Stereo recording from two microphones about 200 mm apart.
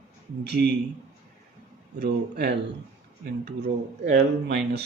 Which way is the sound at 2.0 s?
55° right (ahead or behind).